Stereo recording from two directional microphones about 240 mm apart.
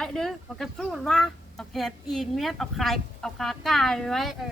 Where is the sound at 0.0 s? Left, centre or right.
Centre.